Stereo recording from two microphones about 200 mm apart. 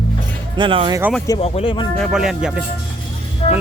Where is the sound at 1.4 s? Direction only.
30° left (ahead or behind).